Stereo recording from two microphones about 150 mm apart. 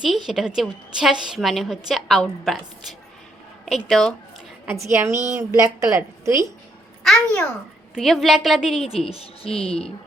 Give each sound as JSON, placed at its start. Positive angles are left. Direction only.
{"t": 0.0, "sound": "a woman's voice", "side_deg": 0}
{"t": 4.6, "sound": "a woman's voice", "side_deg": -15}
{"t": 7.0, "sound": "a child's voice", "side_deg": 5}
{"t": 9.0, "sound": "speech", "side_deg": 40}